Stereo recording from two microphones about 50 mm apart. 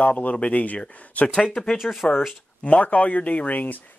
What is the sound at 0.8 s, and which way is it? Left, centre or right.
Speech, left.